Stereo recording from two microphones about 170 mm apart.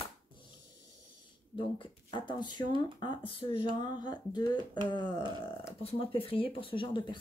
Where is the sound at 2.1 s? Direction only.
30° left (ahead or behind).